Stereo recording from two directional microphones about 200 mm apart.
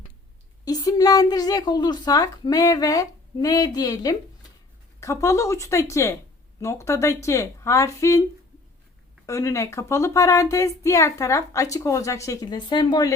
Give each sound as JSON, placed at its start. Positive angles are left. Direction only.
{"t": 0.6, "sound": "a woman's voice", "side_deg": 20}
{"t": 9.2, "sound": "speech", "side_deg": 15}